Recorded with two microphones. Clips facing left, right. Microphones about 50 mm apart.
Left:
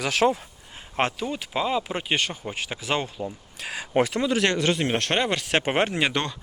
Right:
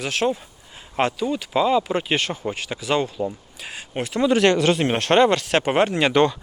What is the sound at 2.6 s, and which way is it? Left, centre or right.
Speech, left.